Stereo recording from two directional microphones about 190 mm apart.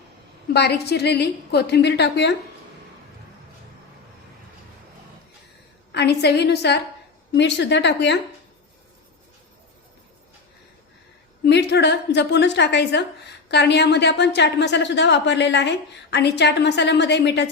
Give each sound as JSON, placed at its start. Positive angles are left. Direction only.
{"t": 0.5, "sound": "a woman's voice", "side_deg": 60}
{"t": 5.9, "sound": "a woman's voice", "side_deg": 60}
{"t": 11.4, "sound": "a woman's voice", "side_deg": 60}